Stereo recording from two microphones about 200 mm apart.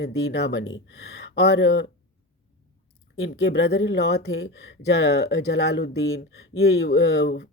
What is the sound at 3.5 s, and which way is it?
Speech, 60° left (ahead or behind).